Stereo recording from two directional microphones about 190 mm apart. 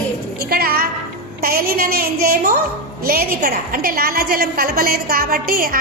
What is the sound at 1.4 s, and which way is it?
A woman's voice, 50° right (ahead or behind).